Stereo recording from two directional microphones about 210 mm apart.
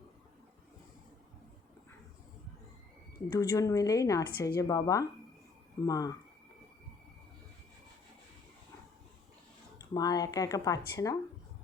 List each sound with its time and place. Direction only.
3.3 s speech: 15° left (ahead or behind)
9.7 s speech: 20° left (ahead or behind)